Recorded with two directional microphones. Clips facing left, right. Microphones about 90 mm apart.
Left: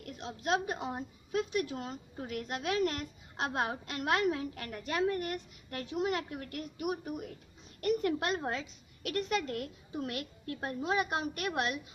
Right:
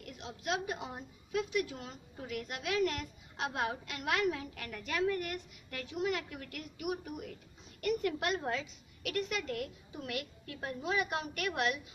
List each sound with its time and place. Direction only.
0.0 s a woman's voice: 35° left (ahead or behind)